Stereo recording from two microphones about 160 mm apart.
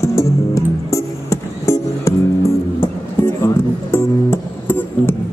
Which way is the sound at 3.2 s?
15° left (ahead or behind).